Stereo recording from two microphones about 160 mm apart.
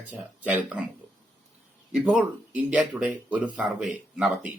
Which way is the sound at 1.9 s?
5° right (ahead or behind).